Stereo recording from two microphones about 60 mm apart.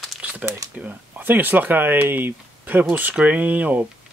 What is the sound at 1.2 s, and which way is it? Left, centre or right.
Speech, right.